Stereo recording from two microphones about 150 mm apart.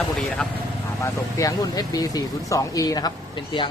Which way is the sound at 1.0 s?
25° left (ahead or behind).